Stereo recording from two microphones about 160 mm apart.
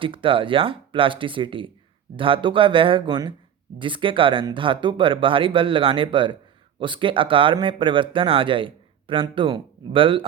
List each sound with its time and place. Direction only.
0.0 s speech: 35° right (ahead or behind)